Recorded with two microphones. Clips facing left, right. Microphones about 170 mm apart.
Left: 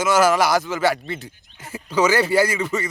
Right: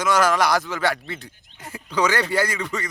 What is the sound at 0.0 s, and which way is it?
Speech, 5° left (ahead or behind).